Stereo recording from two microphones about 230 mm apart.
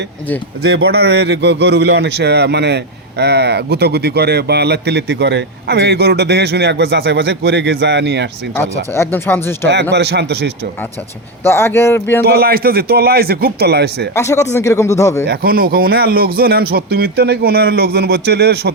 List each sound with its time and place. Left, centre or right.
0.6 s a man's voice: right
8.9 s speech: centre
9.9 s a man's voice: right
11.4 s speech: centre
12.2 s a man's voice: right
14.2 s speech: centre
15.3 s a man's voice: right